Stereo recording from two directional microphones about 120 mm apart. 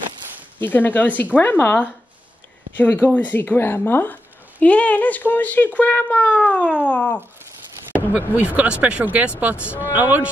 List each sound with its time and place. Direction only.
0.6 s a woman's voice: 15° left (ahead or behind)
8.4 s speech: 10° right (ahead or behind)